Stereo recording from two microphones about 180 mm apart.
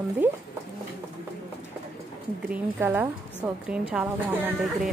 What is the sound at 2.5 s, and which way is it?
Speech, 10° right (ahead or behind).